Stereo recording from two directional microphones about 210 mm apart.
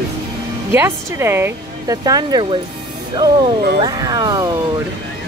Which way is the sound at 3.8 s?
20° right (ahead or behind).